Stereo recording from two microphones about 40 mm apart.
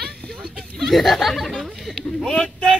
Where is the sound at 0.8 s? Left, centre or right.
Centre.